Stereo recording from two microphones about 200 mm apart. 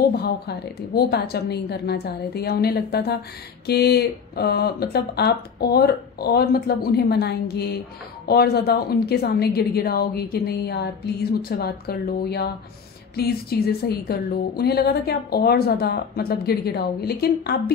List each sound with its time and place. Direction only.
0.2 s a woman's voice: 55° left (ahead or behind)